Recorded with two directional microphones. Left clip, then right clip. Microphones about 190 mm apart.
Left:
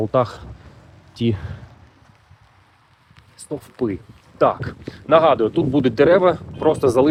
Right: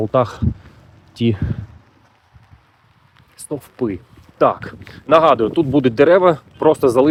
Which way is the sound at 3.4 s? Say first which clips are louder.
Right 2 dB; 25° right (ahead or behind).